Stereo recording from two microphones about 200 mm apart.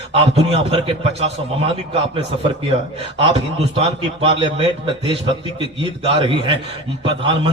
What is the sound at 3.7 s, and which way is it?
A man's voice, 30° right (ahead or behind).